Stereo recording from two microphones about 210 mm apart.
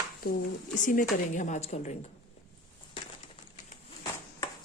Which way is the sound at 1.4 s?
35° left (ahead or behind).